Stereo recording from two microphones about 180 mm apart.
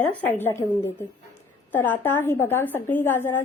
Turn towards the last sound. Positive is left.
turn(degrees=10)  # may be behind; listen again after turning